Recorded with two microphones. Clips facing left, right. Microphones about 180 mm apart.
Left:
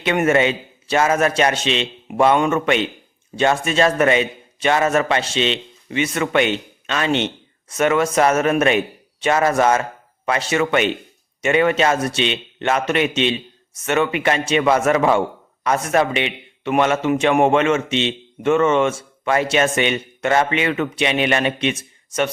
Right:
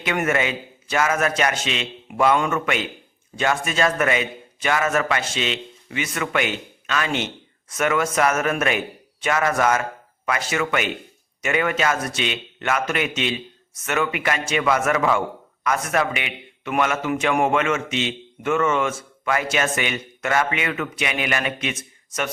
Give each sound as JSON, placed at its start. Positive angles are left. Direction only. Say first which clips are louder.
{"t": 0.0, "sound": "speech", "louder": "left 6 dB", "side_deg": 25}